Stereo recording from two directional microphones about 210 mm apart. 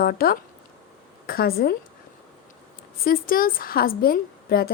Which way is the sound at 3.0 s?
40° left (ahead or behind).